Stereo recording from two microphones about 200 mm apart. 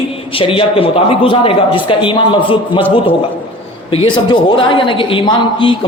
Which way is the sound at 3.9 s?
25° left (ahead or behind).